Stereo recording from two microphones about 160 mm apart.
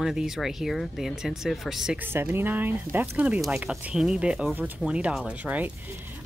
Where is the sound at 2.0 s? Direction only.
15° right (ahead or behind).